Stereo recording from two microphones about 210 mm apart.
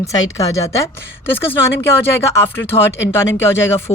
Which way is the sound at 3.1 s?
10° left (ahead or behind).